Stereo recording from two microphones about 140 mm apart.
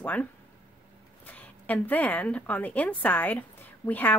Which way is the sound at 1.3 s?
10° left (ahead or behind).